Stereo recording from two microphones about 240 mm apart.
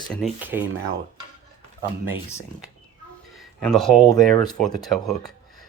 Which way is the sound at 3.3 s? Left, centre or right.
Centre.